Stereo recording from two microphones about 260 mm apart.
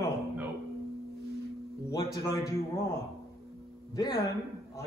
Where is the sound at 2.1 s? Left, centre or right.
Centre.